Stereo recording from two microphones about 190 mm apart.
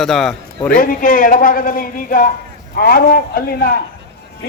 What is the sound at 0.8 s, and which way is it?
A man's voice, 45° left (ahead or behind).